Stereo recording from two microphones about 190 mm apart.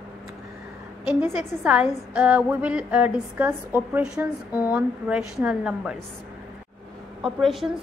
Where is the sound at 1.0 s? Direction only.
10° right (ahead or behind).